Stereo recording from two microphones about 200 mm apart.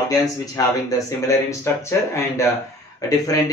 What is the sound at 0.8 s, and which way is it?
Speech, 15° left (ahead or behind).